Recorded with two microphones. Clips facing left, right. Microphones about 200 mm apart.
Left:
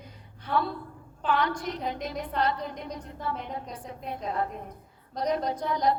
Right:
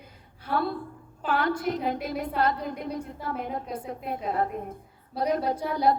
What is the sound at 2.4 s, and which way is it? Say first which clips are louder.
Speech: right 2 dB; 50° right (ahead or behind).